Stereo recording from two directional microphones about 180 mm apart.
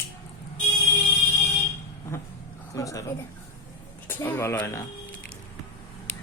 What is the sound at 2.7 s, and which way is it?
Speech, 20° left (ahead or behind).